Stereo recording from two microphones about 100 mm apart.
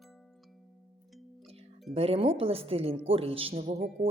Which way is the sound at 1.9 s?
80° right.